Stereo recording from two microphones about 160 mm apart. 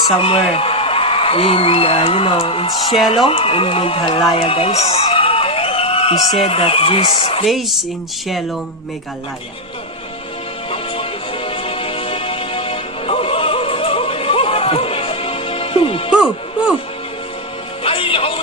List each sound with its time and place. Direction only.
0.2 s a man's voice: 35° left (ahead or behind)
7.4 s speech: centre (ahead or behind)
11.4 s music: 35° left (ahead or behind)
16.1 s music: 5° right (ahead or behind)
17.8 s music: 35° left (ahead or behind)